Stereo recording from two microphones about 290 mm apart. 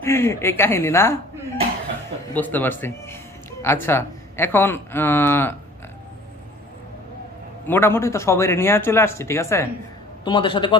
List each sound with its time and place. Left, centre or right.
0.0 s speech: centre
2.3 s speech: centre
7.7 s speech: centre